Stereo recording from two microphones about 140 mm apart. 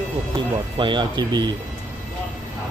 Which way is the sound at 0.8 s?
35° right (ahead or behind).